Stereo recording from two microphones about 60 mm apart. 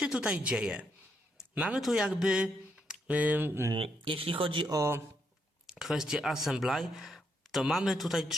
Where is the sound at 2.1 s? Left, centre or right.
Centre.